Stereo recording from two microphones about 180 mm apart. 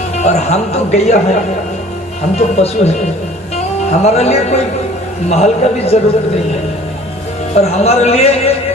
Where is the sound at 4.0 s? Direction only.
35° left (ahead or behind).